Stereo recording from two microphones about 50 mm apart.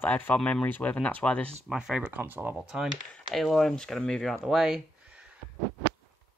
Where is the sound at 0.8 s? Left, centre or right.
Left.